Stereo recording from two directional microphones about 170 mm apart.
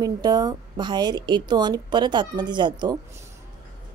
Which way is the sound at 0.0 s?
25° right (ahead or behind).